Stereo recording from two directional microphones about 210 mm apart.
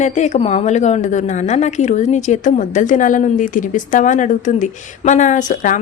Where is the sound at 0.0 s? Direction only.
35° left (ahead or behind).